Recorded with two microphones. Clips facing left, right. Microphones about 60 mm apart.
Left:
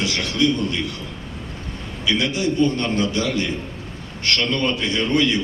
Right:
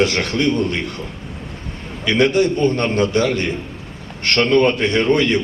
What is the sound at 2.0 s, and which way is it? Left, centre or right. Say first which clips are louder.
A man's voice: right 6 dB; right.